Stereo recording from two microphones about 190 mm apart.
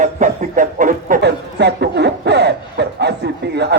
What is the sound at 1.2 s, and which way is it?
Speech, 60° right (ahead or behind).